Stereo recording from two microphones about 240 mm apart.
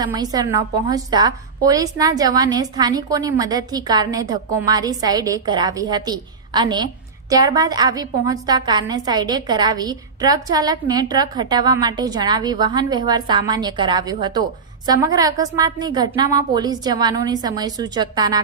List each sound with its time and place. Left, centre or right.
0.0 s a woman's voice: centre